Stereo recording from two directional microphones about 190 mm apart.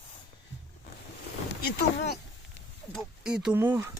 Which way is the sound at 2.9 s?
Centre (ahead or behind).